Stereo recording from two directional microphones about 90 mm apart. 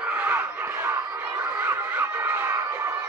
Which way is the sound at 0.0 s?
20° right (ahead or behind).